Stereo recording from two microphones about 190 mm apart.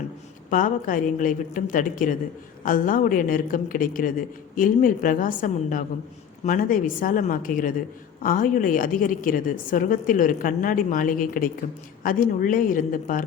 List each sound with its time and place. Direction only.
0.5 s a woman's voice: 45° left (ahead or behind)